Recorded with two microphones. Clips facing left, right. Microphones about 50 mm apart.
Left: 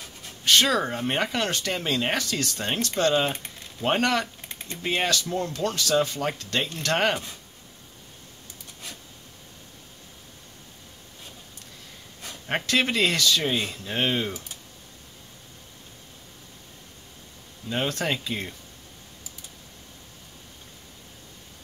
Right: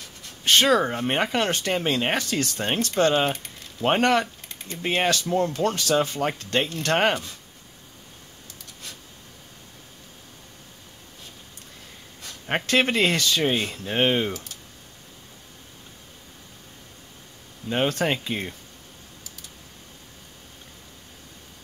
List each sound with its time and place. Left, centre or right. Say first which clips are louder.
0.5 s speech: right 2 dB; right
12.6 s speech: right 2 dB; right
17.6 s speech: right 4 dB; right